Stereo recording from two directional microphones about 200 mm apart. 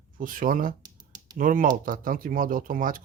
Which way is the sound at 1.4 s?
45° right (ahead or behind).